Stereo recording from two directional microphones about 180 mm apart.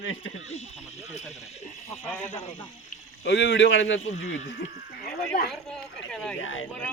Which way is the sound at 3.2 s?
80° left.